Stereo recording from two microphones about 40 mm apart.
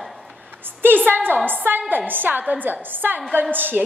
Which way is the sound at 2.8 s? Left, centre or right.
Right.